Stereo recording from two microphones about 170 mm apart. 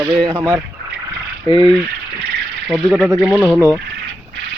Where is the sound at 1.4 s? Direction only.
25° right (ahead or behind).